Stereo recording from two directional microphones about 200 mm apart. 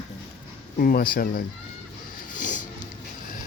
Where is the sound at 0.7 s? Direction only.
45° left (ahead or behind).